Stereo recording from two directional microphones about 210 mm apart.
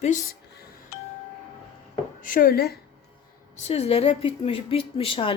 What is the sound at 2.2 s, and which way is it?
Speech, 45° left (ahead or behind).